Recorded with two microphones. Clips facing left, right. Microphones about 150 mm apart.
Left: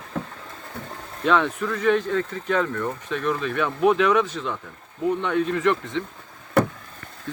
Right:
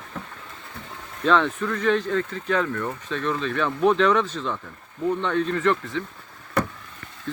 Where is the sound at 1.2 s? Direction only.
10° left (ahead or behind).